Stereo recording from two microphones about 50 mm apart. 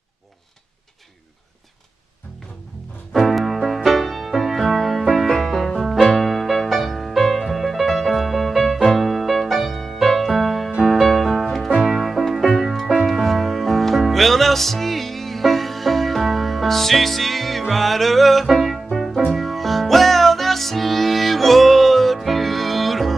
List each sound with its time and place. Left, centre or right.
3.1 s music: centre